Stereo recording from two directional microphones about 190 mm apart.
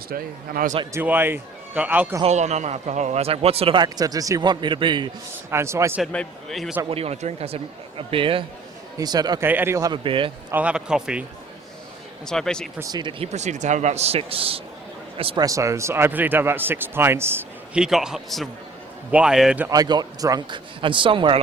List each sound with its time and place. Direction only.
0.1 s speech: 50° right (ahead or behind)
0.9 s a man's voice: 10° right (ahead or behind)
2.2 s a man's voice: 35° right (ahead or behind)
5.5 s a man's voice: 15° right (ahead or behind)
6.0 s a man's voice: 5° left (ahead or behind)
6.9 s a man's voice: 35° right (ahead or behind)
10.5 s a man's voice: 5° right (ahead or behind)
12.8 s a man's voice: 20° right (ahead or behind)
15.4 s a man's voice: 15° right (ahead or behind)
19.7 s a man's voice: 20° right (ahead or behind)